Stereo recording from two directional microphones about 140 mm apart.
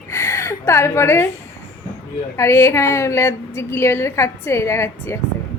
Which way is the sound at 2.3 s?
20° left (ahead or behind).